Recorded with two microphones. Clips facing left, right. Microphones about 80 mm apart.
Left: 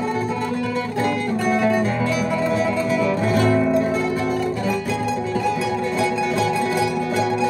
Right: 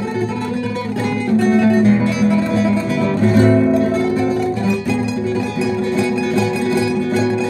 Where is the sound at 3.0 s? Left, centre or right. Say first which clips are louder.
Right 8 dB; right.